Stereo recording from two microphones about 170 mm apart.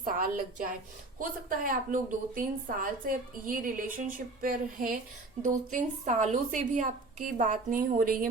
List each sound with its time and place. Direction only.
0.0 s a woman's voice: 55° right (ahead or behind)